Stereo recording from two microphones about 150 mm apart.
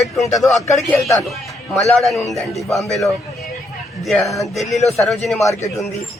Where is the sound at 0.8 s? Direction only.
Centre (ahead or behind).